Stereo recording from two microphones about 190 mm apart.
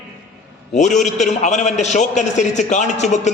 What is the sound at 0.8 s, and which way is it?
A man's voice, 40° left (ahead or behind).